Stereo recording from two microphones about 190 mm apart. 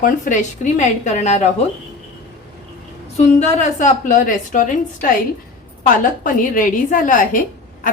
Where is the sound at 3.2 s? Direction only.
35° left (ahead or behind).